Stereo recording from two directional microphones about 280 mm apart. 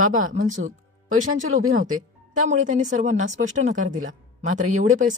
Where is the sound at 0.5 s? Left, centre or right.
Right.